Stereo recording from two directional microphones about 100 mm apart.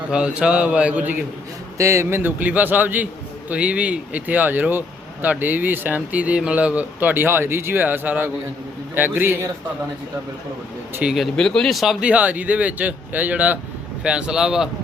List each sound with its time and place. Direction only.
0.1 s speech: 10° right (ahead or behind)
1.8 s a man's voice: 30° right (ahead or behind)
11.1 s speech: centre (ahead or behind)